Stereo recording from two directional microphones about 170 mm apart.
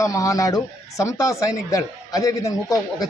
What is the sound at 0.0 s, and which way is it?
Speech, 20° left (ahead or behind).